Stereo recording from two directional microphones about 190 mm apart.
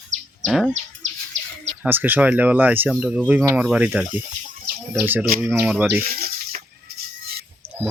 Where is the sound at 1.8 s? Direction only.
10° right (ahead or behind).